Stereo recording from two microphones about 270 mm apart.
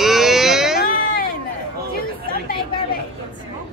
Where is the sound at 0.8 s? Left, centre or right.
Left.